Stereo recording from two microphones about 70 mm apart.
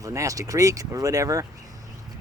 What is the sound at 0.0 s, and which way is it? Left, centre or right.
Speech, right.